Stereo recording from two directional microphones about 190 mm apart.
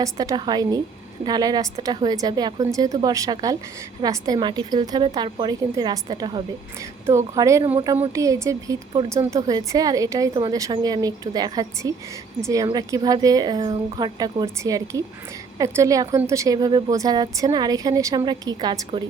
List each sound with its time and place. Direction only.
0.0 s a woman's voice: 20° right (ahead or behind)